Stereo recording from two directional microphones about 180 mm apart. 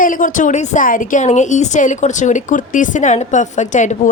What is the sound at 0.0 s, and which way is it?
A woman's voice, 45° left (ahead or behind).